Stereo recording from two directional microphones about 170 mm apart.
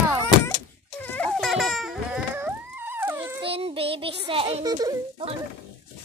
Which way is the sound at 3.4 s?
35° right (ahead or behind).